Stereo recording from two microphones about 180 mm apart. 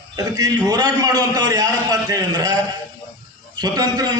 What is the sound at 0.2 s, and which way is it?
A man's voice, 20° right (ahead or behind).